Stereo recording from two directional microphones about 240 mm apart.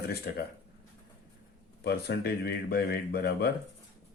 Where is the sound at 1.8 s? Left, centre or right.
Left.